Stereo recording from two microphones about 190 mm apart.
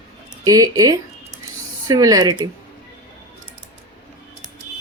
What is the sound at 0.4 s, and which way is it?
Speech, 20° right (ahead or behind).